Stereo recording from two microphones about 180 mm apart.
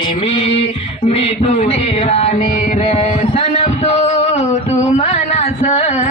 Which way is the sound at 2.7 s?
40° left (ahead or behind).